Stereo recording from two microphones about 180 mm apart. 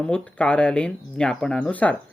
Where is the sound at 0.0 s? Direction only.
5° left (ahead or behind).